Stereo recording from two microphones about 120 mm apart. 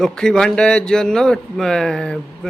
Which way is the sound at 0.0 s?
5° left (ahead or behind).